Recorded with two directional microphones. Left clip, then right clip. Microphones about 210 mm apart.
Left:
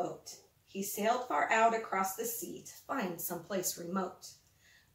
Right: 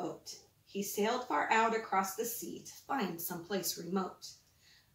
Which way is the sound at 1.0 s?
10° left (ahead or behind).